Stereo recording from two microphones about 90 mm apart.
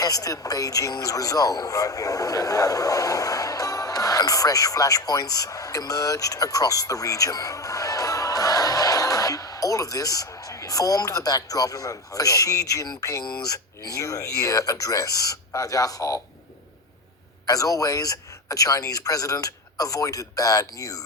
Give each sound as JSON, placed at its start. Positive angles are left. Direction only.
{"t": 0.0, "sound": "a man's voice", "side_deg": 40}
{"t": 17.4, "sound": "a man's voice", "side_deg": 40}